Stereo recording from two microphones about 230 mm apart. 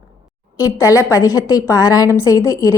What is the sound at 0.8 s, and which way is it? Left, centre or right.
A woman's voice, centre.